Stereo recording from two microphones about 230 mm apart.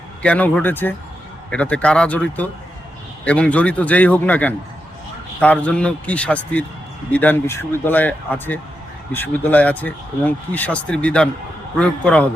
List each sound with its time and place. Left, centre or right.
0.2 s a man's voice: centre